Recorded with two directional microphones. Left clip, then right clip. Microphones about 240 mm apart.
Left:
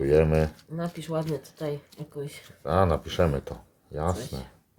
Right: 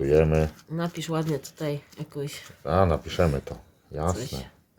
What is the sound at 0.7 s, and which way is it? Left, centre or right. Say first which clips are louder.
Speech: right 2 dB; right.